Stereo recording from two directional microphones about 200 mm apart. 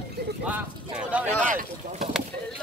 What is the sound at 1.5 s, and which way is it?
Boat, 40° right (ahead or behind).